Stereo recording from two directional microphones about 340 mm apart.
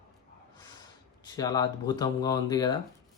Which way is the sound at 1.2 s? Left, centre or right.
Centre.